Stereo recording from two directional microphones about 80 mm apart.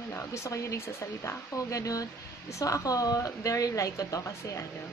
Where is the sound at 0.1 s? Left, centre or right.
Left.